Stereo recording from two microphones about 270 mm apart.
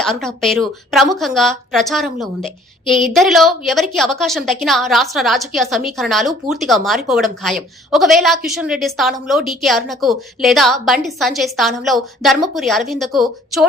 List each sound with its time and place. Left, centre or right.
0.0 s a woman's voice: centre